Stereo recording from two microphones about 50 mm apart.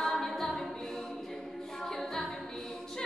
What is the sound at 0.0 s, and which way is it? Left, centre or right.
A capella, centre.